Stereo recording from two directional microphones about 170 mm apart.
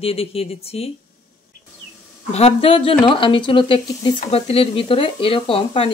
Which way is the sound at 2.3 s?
35° left (ahead or behind).